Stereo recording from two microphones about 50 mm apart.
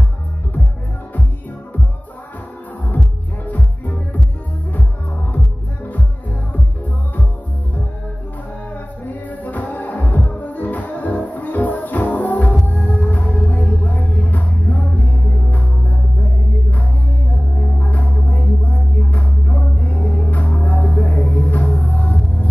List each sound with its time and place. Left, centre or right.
3.4 s music: left
9.0 s music: left
17.6 s music: left